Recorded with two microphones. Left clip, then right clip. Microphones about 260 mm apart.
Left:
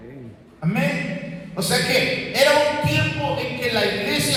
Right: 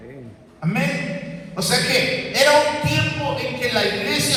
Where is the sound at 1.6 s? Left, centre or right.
Right.